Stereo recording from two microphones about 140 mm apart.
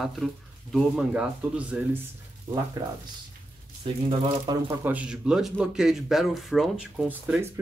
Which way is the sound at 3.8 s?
40° right (ahead or behind).